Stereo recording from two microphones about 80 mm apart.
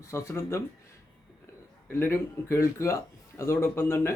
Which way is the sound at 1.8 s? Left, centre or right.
Left.